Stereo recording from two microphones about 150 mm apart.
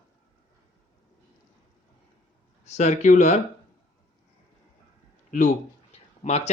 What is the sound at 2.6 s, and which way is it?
Speech, 50° left (ahead or behind).